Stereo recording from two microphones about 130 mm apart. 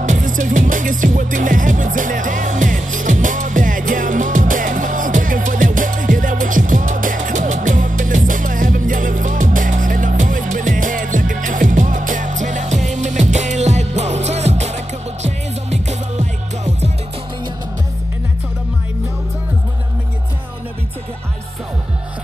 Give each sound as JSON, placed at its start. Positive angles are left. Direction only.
{"t": 0.0, "sound": "music", "side_deg": -85}